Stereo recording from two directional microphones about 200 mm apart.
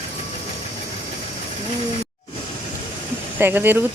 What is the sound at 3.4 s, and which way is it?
Speech, 10° right (ahead or behind).